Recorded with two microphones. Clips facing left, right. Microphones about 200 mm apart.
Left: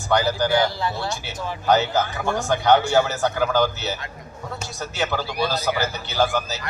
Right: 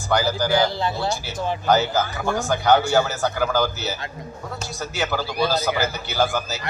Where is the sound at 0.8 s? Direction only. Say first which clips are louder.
Right 2 dB; 25° right (ahead or behind).